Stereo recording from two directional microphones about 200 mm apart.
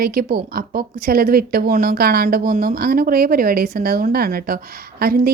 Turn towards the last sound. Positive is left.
turn(degrees=-50)  # may be behind; listen again after turning